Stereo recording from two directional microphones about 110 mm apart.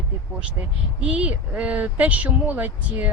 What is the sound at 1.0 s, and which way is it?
Speech, 10° right (ahead or behind).